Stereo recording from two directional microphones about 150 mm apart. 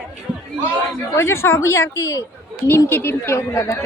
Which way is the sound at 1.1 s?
15° left (ahead or behind).